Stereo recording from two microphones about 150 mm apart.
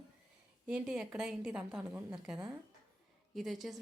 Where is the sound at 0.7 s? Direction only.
5° right (ahead or behind).